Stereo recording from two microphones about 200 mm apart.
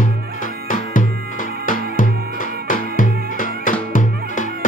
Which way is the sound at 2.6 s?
40° left (ahead or behind).